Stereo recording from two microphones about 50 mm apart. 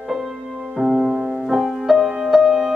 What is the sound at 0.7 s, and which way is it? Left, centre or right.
Music, centre.